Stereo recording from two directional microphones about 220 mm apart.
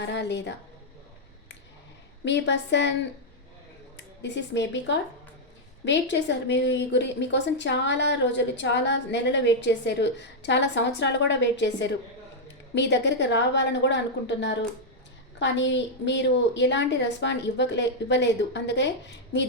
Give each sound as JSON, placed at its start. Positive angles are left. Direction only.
{"t": 0.0, "sound": "a woman's voice", "side_deg": 55}
{"t": 2.2, "sound": "a woman's voice", "side_deg": 55}
{"t": 3.9, "sound": "a woman's voice", "side_deg": 50}